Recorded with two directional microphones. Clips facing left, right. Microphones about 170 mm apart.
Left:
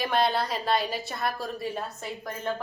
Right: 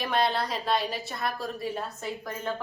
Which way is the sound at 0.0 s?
Centre (ahead or behind).